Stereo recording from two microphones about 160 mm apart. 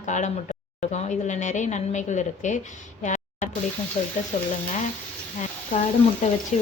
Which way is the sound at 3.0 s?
50° left (ahead or behind).